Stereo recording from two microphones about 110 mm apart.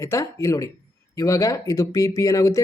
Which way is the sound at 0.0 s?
30° left (ahead or behind).